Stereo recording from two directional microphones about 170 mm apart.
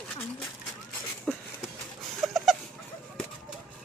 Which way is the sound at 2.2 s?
Centre (ahead or behind).